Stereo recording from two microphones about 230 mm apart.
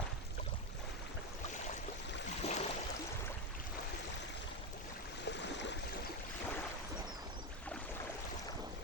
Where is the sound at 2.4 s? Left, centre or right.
Left.